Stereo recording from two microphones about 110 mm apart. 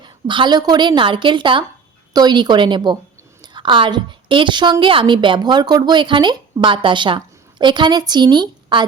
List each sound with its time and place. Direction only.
0.0 s a woman's voice: 45° right (ahead or behind)